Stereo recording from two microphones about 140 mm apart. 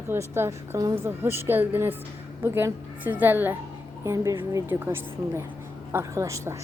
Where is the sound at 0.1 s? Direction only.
15° right (ahead or behind).